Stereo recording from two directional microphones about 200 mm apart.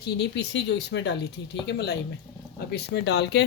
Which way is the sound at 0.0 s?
60° left (ahead or behind).